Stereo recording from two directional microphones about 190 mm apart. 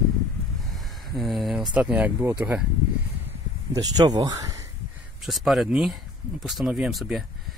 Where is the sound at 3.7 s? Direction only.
20° right (ahead or behind).